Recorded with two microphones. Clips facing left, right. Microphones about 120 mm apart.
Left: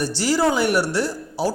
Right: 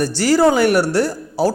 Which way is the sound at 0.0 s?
50° right (ahead or behind).